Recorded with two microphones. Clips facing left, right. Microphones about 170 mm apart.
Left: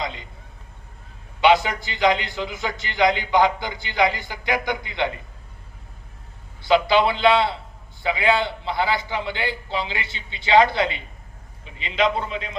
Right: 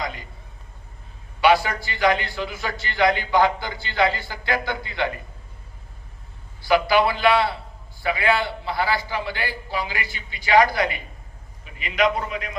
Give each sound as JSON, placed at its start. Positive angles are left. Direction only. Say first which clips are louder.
{"t": 0.0, "sound": "a sound", "louder": "left 1 dB", "side_deg": 25}
{"t": 1.4, "sound": "a man's voice", "louder": "left 1 dB", "side_deg": 20}
{"t": 6.6, "sound": "a man's voice", "louder": "left 1 dB", "side_deg": 20}